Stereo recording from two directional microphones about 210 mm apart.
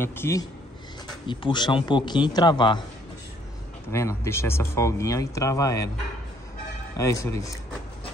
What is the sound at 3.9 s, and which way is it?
Speech, 15° left (ahead or behind).